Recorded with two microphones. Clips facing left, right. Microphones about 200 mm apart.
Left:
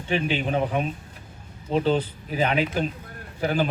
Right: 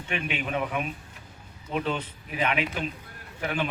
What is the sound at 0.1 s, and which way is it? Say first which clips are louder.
Speech: left 6 dB; 30° left (ahead or behind).